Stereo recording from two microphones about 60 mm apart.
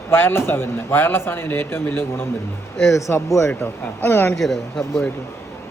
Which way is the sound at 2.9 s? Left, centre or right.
Left.